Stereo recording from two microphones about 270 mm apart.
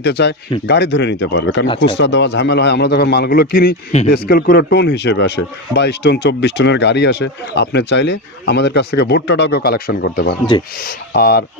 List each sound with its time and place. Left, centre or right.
0.0 s speech: left